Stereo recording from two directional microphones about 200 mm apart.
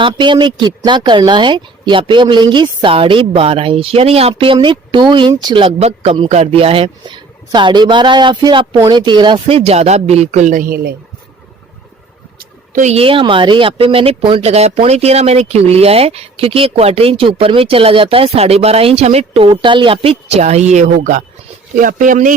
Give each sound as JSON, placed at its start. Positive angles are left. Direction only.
{"t": 0.0, "sound": "speech", "side_deg": -25}
{"t": 12.7, "sound": "speech", "side_deg": -35}